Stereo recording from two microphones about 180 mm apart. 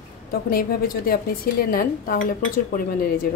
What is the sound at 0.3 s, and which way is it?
A woman's voice, 55° left (ahead or behind).